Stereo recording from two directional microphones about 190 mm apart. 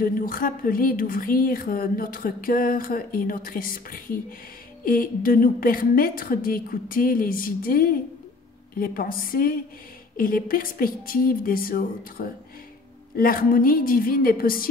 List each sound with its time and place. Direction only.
0.0 s speech: 50° left (ahead or behind)